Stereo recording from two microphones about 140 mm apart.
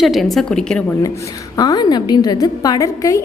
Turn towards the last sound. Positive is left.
turn(degrees=25)  # may be behind; listen again after turning